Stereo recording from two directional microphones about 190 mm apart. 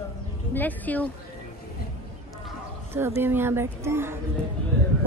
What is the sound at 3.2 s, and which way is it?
Speech, 10° right (ahead or behind).